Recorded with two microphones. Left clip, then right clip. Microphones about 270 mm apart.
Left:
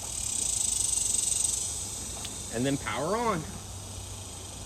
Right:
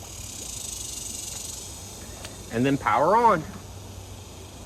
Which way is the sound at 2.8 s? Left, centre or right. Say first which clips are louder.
Right 14 dB; centre.